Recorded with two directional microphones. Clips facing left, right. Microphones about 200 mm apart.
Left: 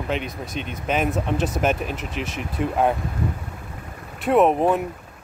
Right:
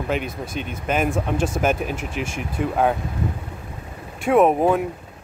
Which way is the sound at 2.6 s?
Centre (ahead or behind).